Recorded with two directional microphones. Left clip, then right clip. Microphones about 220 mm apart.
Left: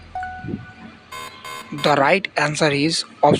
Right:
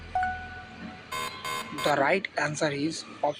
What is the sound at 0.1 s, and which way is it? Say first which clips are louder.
Wind chime: right 1 dB; centre (ahead or behind).